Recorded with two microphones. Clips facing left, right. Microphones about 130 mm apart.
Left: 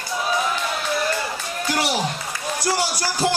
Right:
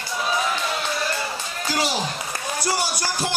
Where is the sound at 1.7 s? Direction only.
65° left (ahead or behind).